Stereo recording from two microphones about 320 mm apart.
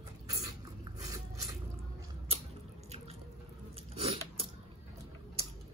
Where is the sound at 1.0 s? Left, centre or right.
Centre.